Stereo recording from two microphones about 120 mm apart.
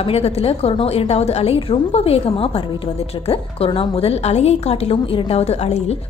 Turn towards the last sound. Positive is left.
turn(degrees=65)  # may be behind; listen again after turning